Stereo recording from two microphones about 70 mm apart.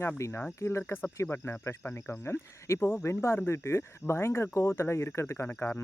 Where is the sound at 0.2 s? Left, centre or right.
Left.